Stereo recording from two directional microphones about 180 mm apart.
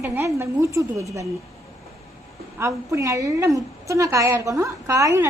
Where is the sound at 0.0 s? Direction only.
15° right (ahead or behind).